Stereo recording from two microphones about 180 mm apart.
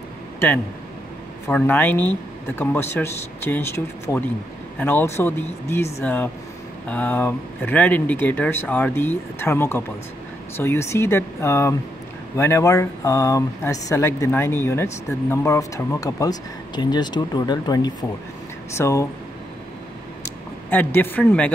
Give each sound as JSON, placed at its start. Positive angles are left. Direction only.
{"t": 1.5, "sound": "speech", "side_deg": 10}
{"t": 20.7, "sound": "speech", "side_deg": 10}